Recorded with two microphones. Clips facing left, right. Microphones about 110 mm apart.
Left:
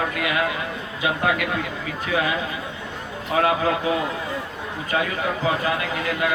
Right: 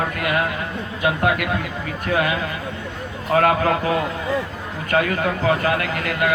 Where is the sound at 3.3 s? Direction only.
55° right (ahead or behind).